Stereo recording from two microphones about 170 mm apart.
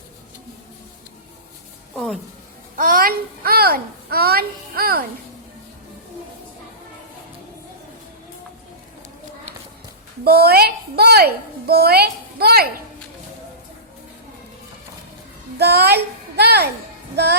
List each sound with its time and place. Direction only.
2.7 s a child's voice: 55° right (ahead or behind)
10.2 s a woman's voice: 65° right (ahead or behind)
15.5 s a woman's voice: 70° right (ahead or behind)